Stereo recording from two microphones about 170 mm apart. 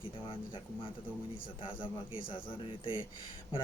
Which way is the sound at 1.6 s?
30° left (ahead or behind).